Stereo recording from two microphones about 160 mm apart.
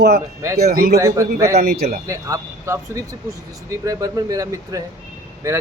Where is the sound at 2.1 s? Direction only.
20° right (ahead or behind).